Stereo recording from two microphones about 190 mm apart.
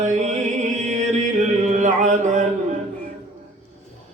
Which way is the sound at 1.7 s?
40° right (ahead or behind).